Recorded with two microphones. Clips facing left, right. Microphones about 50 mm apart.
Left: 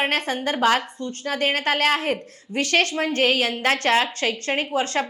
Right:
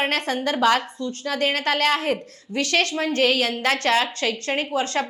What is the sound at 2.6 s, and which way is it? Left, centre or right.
A woman's voice, left.